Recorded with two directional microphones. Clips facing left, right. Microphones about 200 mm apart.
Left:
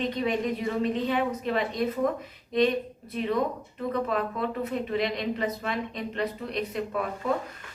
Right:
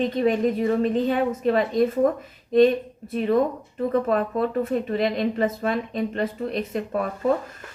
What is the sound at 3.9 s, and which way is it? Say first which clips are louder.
A woman's voice: right 6 dB; 45° right (ahead or behind).